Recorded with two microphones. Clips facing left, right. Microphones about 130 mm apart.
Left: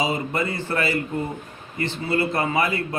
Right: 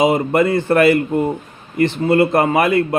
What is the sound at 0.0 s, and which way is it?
A man's voice, 50° right (ahead or behind).